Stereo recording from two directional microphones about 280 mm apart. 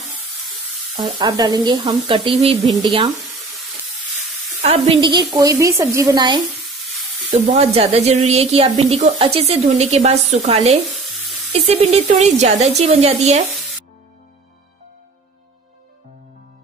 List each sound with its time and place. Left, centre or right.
0.5 s sizzle: centre
1.1 s a woman's voice: centre
4.6 s sizzle: right
5.0 s a woman's voice: centre